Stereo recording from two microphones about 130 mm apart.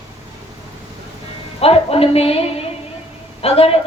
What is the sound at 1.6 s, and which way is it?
A woman's voice, 50° left (ahead or behind).